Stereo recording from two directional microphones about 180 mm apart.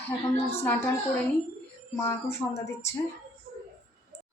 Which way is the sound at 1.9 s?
15° left (ahead or behind).